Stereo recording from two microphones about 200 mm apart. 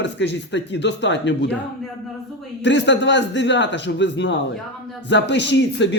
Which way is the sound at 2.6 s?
60° left (ahead or behind).